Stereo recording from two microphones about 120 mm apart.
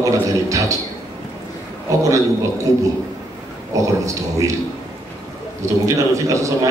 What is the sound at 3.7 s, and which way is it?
Speech, 25° right (ahead or behind).